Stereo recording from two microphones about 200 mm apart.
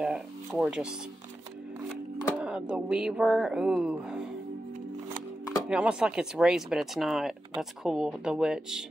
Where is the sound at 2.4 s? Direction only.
5° right (ahead or behind).